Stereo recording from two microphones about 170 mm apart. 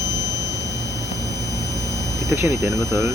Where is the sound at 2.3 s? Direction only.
15° right (ahead or behind).